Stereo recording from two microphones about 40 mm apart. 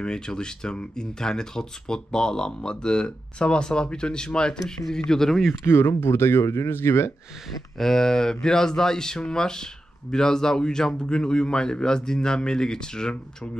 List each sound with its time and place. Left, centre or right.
0.0 s speech: centre
5.5 s speech: left
7.8 s speech: centre